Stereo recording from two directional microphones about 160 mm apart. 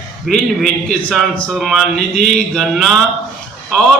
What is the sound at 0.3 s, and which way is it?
A man's voice, centre (ahead or behind).